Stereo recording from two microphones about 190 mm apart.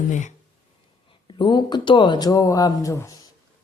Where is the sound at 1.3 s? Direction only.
25° left (ahead or behind).